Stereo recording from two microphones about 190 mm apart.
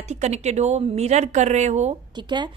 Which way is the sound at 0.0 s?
35° right (ahead or behind).